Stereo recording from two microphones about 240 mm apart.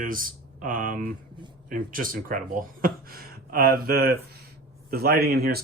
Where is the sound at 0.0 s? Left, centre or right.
Right.